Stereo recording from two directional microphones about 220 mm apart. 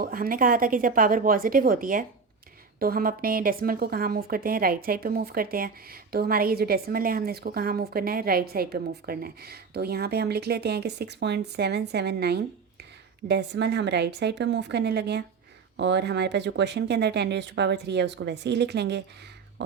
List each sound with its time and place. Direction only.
0.0 s a woman's voice: 40° right (ahead or behind)